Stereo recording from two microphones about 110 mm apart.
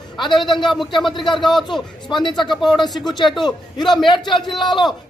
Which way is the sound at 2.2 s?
45° left (ahead or behind).